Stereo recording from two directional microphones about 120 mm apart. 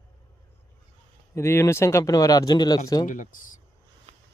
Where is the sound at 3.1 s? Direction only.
90° left.